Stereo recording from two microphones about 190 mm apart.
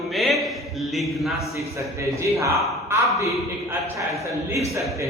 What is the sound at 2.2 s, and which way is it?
A man's voice, 15° right (ahead or behind).